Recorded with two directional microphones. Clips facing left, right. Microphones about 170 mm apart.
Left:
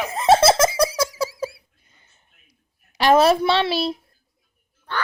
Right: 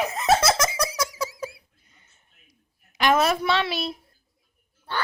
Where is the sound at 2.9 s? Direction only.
30° left (ahead or behind).